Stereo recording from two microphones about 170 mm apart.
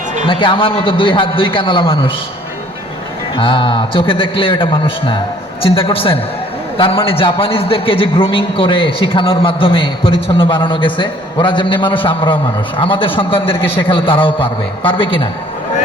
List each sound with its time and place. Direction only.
0.3 s a man's voice: 30° left (ahead or behind)
3.3 s a man's voice: 30° left (ahead or behind)